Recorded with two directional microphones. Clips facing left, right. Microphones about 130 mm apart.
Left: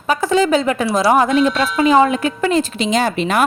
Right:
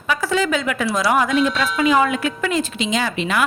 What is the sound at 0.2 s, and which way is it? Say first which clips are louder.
Speech: left 7 dB; 25° left (ahead or behind).